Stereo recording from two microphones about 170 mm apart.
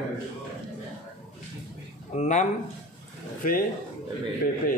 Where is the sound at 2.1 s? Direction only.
45° left (ahead or behind).